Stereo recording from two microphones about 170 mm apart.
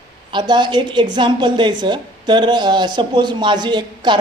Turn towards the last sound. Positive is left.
turn(degrees=-25)  # may be behind; listen again after turning